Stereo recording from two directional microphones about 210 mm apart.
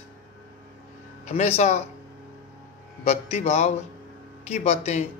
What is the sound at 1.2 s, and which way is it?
Speech, 30° left (ahead or behind).